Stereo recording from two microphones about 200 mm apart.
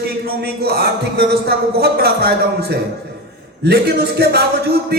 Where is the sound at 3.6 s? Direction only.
50° right (ahead or behind).